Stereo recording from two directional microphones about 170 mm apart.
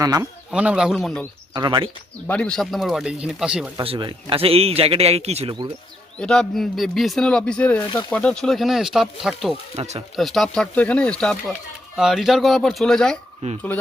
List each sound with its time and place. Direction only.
0.0 s speech: 20° right (ahead or behind)
0.5 s speech: 5° right (ahead or behind)
1.5 s speech: 25° right (ahead or behind)
2.2 s speech: 10° left (ahead or behind)
3.8 s a man's voice: 30° right (ahead or behind)
6.1 s speech: 5° left (ahead or behind)
9.7 s a man's voice: 40° right (ahead or behind)
10.2 s speech: centre (ahead or behind)
13.4 s speech: 45° right (ahead or behind)